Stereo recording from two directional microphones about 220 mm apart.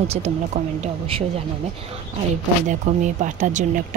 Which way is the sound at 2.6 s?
35° right (ahead or behind).